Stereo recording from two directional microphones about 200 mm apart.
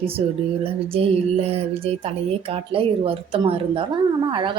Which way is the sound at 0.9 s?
30° right (ahead or behind).